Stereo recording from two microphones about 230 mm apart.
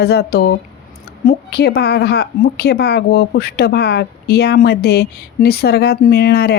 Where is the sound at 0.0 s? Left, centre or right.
Left.